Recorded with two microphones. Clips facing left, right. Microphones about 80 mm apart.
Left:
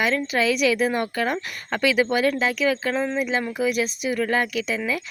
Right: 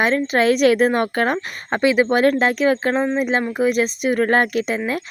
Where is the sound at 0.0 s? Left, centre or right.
Right.